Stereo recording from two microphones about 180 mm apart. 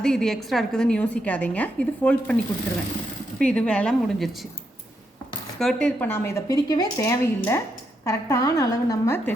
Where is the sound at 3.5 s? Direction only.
5° left (ahead or behind).